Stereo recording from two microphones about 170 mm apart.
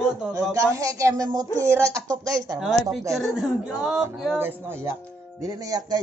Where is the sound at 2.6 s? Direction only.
Centre (ahead or behind).